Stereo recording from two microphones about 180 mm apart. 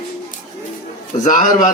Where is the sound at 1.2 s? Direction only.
45° left (ahead or behind).